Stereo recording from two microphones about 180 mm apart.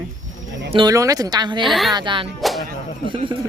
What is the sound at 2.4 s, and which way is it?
Music, centre (ahead or behind).